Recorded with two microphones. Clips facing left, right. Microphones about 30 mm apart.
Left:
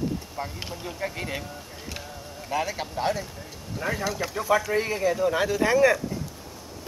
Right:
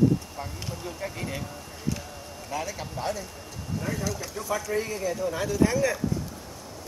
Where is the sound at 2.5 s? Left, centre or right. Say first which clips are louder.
Left 5 dB; left.